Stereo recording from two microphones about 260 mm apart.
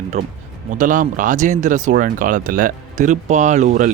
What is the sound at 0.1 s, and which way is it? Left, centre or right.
Speech, right.